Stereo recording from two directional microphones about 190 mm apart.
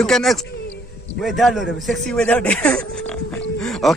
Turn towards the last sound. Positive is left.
turn(degrees=0)  # may be behind; listen again after turning